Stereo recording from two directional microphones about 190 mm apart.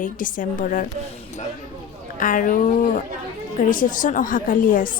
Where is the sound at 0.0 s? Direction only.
45° left (ahead or behind).